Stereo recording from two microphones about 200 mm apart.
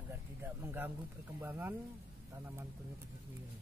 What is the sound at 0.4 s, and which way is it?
Speech, 10° right (ahead or behind).